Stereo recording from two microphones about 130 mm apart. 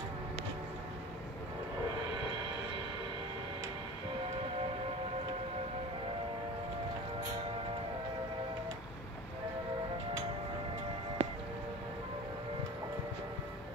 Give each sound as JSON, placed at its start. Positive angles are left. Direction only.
{"t": 11.2, "sound": "music", "side_deg": -50}